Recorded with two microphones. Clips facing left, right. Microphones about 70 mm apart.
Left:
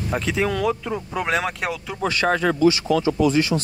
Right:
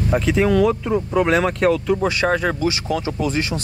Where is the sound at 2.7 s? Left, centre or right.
Right.